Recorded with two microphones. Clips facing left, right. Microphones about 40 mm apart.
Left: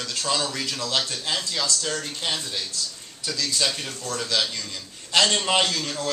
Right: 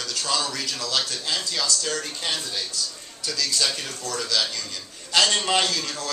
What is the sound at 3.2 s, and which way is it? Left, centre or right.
A man's voice, left.